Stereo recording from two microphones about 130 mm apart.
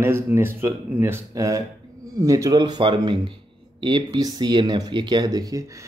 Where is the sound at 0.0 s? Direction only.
20° right (ahead or behind).